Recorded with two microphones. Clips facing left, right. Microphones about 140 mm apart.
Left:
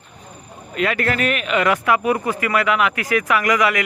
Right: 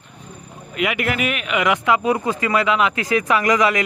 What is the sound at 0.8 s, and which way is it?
A man's voice, 15° right (ahead or behind).